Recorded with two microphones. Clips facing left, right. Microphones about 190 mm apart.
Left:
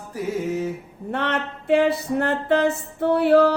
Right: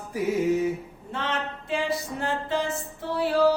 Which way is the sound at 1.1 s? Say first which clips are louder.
Left 5 dB; 60° left (ahead or behind).